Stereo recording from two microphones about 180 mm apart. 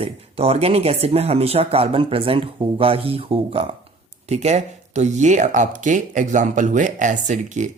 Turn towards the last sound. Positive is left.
turn(degrees=-40)  # may be behind; listen again after turning